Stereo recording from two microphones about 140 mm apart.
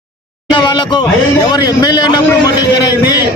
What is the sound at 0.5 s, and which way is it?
A man's voice, 35° left (ahead or behind).